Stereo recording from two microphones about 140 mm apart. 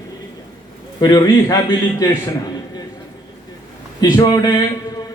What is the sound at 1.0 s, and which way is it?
A man's voice, 25° left (ahead or behind).